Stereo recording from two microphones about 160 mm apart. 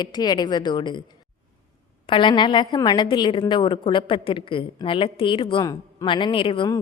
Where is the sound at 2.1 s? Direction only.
30° left (ahead or behind).